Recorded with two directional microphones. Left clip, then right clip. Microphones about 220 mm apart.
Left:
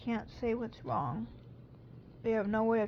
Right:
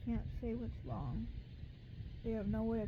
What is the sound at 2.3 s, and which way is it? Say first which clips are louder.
Speech: left 10 dB; 20° left (ahead or behind).